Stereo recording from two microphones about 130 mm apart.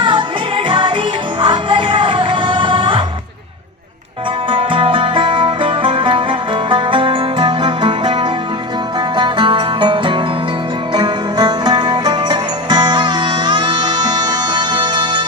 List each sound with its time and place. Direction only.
0.0 s music: 40° right (ahead or behind)
4.5 s music: 40° right (ahead or behind)